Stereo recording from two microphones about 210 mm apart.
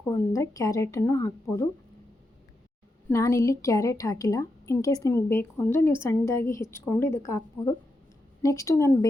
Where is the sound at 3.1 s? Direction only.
15° left (ahead or behind).